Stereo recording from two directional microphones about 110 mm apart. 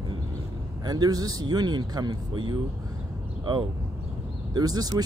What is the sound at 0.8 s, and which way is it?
Speech, 35° right (ahead or behind).